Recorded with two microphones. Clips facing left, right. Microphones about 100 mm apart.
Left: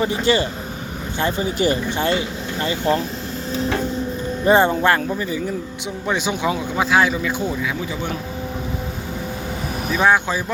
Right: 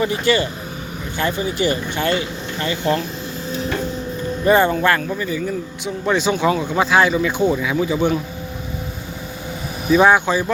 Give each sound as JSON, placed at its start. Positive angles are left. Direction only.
{"t": 0.0, "sound": "speech", "side_deg": 30}
{"t": 4.4, "sound": "speech", "side_deg": 25}
{"t": 6.1, "sound": "speech", "side_deg": 10}
{"t": 9.9, "sound": "speech", "side_deg": -10}